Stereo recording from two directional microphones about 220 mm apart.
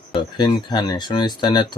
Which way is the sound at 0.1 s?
20° left (ahead or behind).